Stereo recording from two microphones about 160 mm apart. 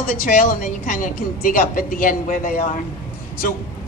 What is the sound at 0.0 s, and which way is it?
A man's voice, 65° left (ahead or behind).